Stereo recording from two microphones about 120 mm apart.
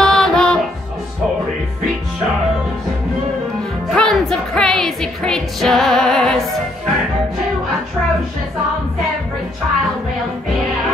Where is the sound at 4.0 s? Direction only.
5° left (ahead or behind).